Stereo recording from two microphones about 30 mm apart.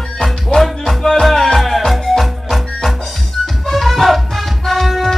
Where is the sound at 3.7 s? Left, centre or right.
Centre.